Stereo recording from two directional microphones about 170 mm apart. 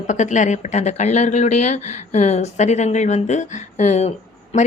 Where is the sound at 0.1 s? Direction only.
45° left (ahead or behind).